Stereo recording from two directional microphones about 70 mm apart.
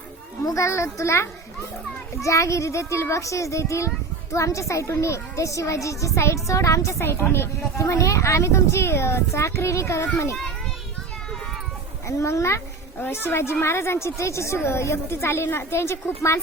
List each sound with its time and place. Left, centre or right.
0.4 s speech: left
7.0 s speech: left
12.0 s speech: left
13.0 s a woman's voice: left